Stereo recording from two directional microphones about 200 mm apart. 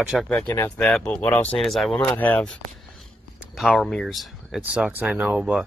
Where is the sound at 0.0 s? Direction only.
Centre (ahead or behind).